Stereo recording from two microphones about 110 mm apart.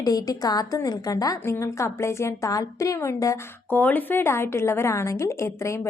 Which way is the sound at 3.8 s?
15° left (ahead or behind).